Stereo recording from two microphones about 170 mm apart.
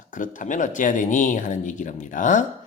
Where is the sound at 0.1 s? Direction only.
50° left (ahead or behind).